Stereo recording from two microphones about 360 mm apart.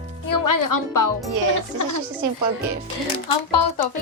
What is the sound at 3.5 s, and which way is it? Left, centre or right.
Speech, left.